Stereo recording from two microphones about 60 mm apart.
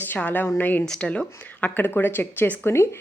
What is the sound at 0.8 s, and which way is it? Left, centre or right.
Speech, centre.